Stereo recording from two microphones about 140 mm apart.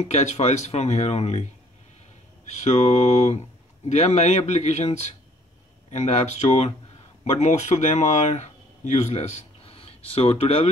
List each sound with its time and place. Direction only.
0.0 s speech: 55° left (ahead or behind)
2.6 s speech: 50° left (ahead or behind)